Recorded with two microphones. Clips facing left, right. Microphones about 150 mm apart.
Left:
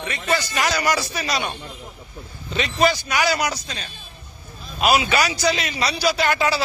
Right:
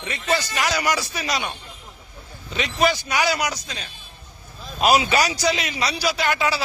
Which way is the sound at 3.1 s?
25° right (ahead or behind).